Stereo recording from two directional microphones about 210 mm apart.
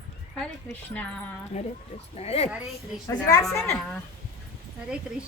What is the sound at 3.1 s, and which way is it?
Speech, 15° left (ahead or behind).